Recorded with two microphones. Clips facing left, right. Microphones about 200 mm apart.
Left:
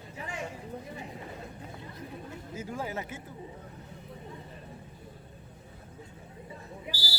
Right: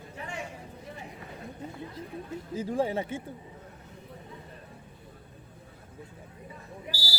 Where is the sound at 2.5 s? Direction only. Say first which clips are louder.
Right 8 dB; 30° right (ahead or behind).